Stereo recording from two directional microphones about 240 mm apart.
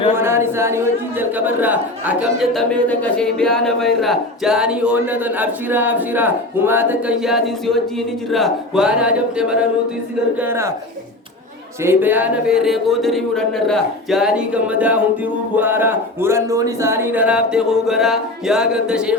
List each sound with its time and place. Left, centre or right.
0.2 s speech: centre
11.8 s speech: centre